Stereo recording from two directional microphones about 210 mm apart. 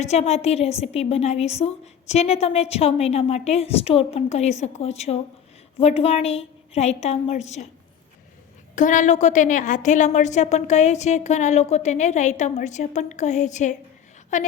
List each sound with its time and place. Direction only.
0.0 s a woman's voice: 30° left (ahead or behind)
8.7 s a woman's voice: 35° left (ahead or behind)